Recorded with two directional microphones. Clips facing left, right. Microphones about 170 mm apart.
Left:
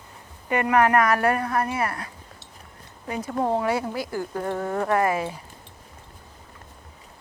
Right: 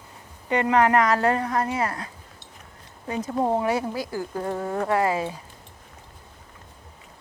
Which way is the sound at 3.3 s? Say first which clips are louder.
Even; 15° right (ahead or behind).